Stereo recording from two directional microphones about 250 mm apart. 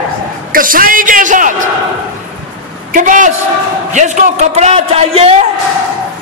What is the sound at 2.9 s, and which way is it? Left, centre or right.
A man's voice, right.